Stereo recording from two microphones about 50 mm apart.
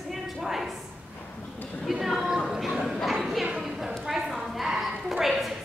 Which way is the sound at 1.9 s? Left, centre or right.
Centre.